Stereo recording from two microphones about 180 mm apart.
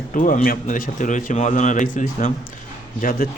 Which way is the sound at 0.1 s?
45° left (ahead or behind).